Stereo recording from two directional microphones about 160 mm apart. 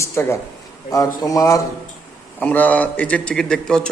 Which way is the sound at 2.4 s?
10° left (ahead or behind).